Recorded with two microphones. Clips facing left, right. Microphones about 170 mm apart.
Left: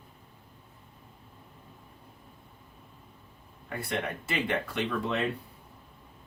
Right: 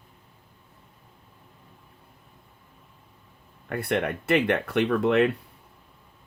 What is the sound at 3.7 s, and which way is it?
Speech, 60° right (ahead or behind).